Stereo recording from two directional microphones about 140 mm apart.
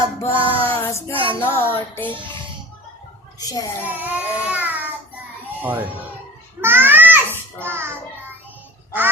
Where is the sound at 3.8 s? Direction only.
15° right (ahead or behind).